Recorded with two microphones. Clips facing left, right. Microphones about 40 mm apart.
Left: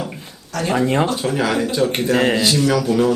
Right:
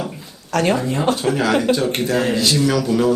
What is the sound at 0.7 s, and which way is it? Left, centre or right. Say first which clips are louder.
Speech: left 7 dB; left.